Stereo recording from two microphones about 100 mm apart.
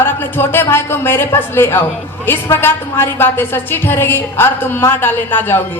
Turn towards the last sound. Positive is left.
turn(degrees=20)  # may be behind; listen again after turning